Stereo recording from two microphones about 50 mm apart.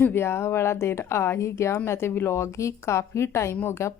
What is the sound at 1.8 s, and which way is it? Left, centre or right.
A woman's voice, left.